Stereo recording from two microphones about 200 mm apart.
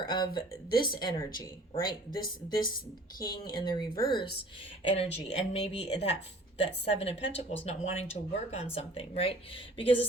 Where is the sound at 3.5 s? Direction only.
20° left (ahead or behind).